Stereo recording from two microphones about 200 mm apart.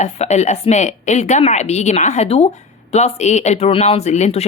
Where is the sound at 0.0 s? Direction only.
35° left (ahead or behind).